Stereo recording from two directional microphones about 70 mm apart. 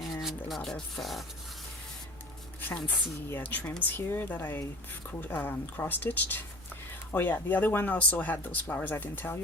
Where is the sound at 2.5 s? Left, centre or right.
Left.